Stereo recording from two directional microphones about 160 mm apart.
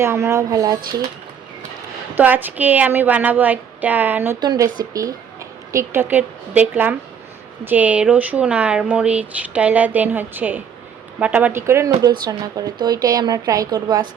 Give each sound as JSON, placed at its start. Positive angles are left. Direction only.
{"t": 0.0, "sound": "speech", "side_deg": -15}
{"t": 2.1, "sound": "speech", "side_deg": -10}
{"t": 4.4, "sound": "speech", "side_deg": -25}
{"t": 5.7, "sound": "speech", "side_deg": -15}